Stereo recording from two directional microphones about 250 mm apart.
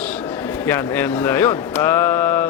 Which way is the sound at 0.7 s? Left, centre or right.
Centre.